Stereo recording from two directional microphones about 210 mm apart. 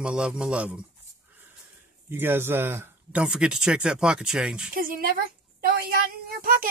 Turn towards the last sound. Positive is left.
turn(degrees=-45)  # may be behind; listen again after turning